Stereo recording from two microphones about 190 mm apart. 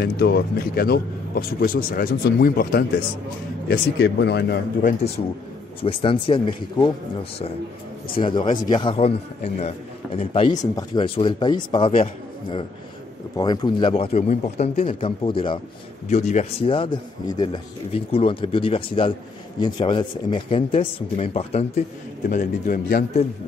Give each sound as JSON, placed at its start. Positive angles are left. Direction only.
{"t": 0.0, "sound": "speech", "side_deg": 55}
{"t": 5.8, "sound": "a man's voice", "side_deg": 30}
{"t": 8.2, "sound": "a man's voice", "side_deg": 25}
{"t": 16.1, "sound": "a man's voice", "side_deg": 35}
{"t": 22.3, "sound": "speech", "side_deg": 45}